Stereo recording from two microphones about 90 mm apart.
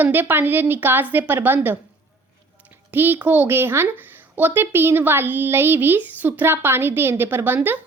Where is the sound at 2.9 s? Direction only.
20° right (ahead or behind).